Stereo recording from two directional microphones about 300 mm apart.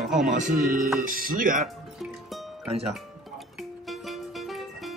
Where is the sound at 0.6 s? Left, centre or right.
Right.